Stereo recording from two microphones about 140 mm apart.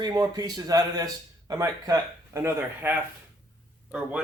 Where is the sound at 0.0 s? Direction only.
25° right (ahead or behind).